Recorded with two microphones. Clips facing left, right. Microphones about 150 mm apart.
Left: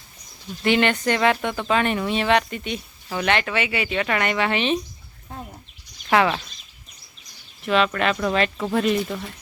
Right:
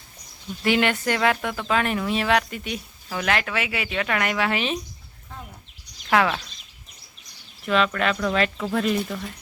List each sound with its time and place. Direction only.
0.6 s speech: 5° right (ahead or behind)
6.1 s speech: 5° left (ahead or behind)
7.6 s speech: centre (ahead or behind)